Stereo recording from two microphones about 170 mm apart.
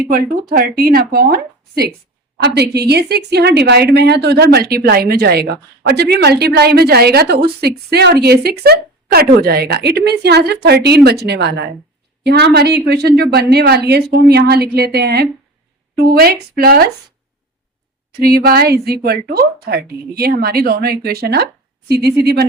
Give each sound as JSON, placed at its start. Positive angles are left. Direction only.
{"t": 0.1, "sound": "a woman's voice", "side_deg": -60}
{"t": 18.2, "sound": "a woman's voice", "side_deg": -65}